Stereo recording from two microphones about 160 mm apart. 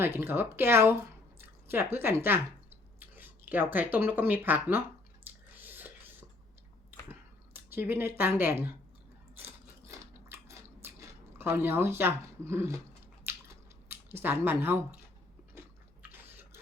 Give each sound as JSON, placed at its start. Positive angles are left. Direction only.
{"t": 0.0, "sound": "speech", "side_deg": -15}
{"t": 5.2, "sound": "a sound", "side_deg": -10}
{"t": 7.1, "sound": "speech", "side_deg": -10}
{"t": 9.3, "sound": "biting", "side_deg": -15}
{"t": 10.8, "sound": "speech", "side_deg": -15}
{"t": 13.2, "sound": "chewing", "side_deg": -15}
{"t": 16.0, "sound": "a sound", "side_deg": -15}